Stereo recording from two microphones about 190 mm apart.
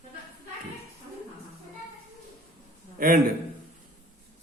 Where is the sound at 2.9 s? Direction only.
45° right (ahead or behind).